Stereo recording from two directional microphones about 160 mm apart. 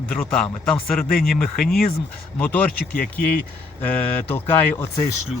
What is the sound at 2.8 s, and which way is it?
Speech, 65° left (ahead or behind).